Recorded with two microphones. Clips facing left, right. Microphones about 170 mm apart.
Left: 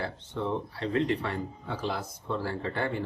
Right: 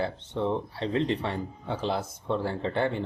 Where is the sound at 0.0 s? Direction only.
25° right (ahead or behind).